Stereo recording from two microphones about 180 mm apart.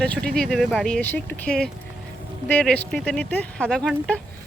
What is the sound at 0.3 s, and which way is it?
Speech, centre (ahead or behind).